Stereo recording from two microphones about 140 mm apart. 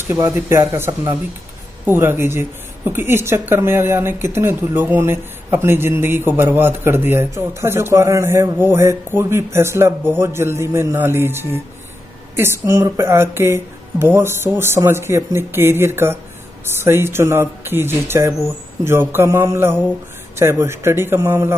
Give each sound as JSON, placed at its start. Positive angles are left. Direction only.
{"t": 0.1, "sound": "speech", "side_deg": -15}